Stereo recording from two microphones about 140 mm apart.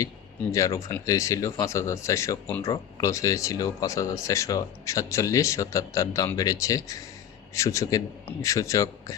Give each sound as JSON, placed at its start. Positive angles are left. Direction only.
{"t": 0.5, "sound": "speech", "side_deg": 20}